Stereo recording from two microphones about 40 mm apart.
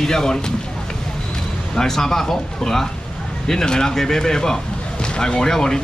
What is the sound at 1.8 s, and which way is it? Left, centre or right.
Speech, centre.